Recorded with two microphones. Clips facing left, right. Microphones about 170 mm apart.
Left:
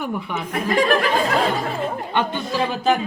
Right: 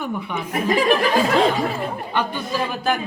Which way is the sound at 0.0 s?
10° left (ahead or behind).